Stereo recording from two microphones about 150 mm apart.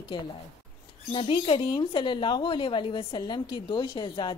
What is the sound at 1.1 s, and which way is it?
A woman's voice, 35° left (ahead or behind).